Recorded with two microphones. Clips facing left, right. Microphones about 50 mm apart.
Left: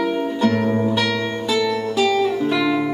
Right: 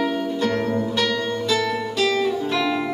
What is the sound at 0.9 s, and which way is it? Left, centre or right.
Music, centre.